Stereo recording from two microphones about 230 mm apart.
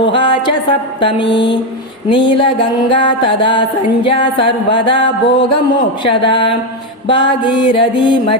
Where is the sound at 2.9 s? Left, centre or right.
Left.